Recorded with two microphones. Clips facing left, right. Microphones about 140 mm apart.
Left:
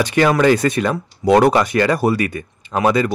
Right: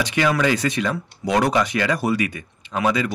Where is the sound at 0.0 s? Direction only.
50° left (ahead or behind).